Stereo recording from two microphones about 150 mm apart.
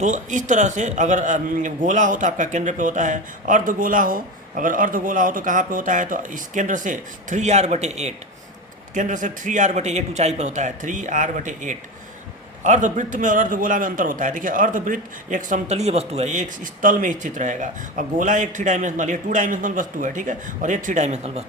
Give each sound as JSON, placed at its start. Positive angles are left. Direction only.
{"t": 0.0, "sound": "a man's voice", "side_deg": -55}